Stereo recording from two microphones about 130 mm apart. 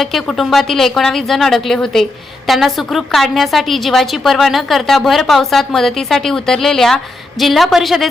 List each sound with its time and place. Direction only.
0.0 s a woman's voice: centre (ahead or behind)